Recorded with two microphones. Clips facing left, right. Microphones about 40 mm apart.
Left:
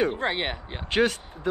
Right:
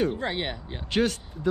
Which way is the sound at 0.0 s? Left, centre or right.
Left.